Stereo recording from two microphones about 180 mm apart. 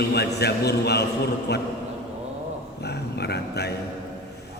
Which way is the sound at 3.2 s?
65° left (ahead or behind).